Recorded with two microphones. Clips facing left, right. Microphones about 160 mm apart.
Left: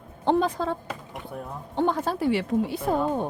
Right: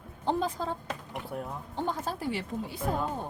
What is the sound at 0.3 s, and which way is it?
Speech, 70° left (ahead or behind).